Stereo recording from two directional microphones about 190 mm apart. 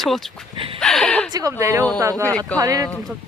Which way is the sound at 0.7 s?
5° left (ahead or behind).